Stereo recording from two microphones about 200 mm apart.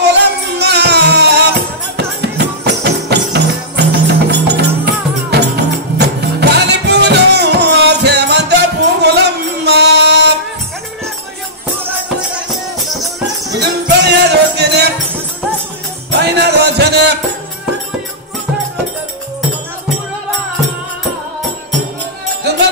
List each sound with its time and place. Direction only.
0.0 s music: 55° right (ahead or behind)
13.2 s music: 60° right (ahead or behind)
16.1 s music: 55° right (ahead or behind)
22.4 s music: 55° right (ahead or behind)